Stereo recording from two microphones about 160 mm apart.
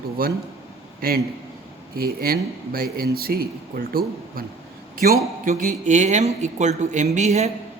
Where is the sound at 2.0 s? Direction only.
70° right (ahead or behind).